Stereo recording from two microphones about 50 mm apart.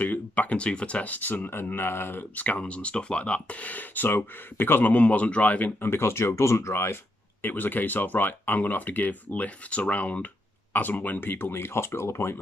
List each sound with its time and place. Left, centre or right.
0.0 s speech: left
2.3 s speech: left
4.9 s speech: left
5.8 s speech: left
6.7 s speech: left
7.4 s speech: left